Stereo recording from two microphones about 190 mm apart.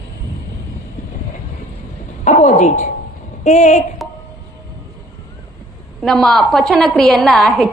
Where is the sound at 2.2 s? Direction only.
40° left (ahead or behind).